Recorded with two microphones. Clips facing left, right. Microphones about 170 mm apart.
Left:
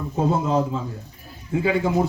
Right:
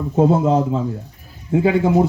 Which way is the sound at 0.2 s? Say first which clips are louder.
Right 6 dB; 60° right (ahead or behind).